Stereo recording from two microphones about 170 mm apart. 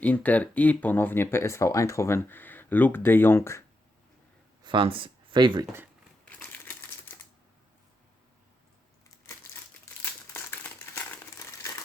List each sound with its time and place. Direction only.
0.0 s speech: 10° left (ahead or behind)
4.6 s speech: 30° right (ahead or behind)
6.2 s typewriter: 10° left (ahead or behind)
9.0 s a sound: 15° left (ahead or behind)
10.0 s crumpling: 10° left (ahead or behind)